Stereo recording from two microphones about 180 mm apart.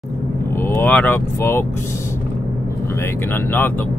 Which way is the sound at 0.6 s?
15° left (ahead or behind).